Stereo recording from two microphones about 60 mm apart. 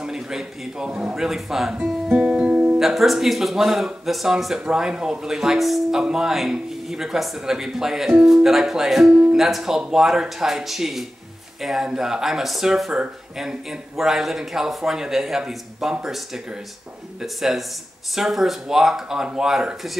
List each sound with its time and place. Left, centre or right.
0.0 s speech: centre
2.1 s music: centre
2.8 s speech: centre
17.2 s speech: centre